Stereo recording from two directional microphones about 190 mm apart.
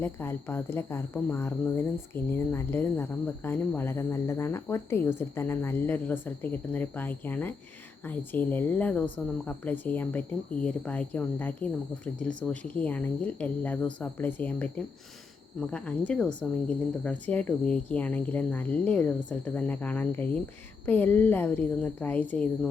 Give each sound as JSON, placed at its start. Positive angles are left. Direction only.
{"t": 0.0, "sound": "speech", "side_deg": 10}